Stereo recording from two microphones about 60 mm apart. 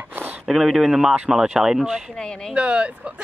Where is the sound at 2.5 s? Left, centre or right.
Centre.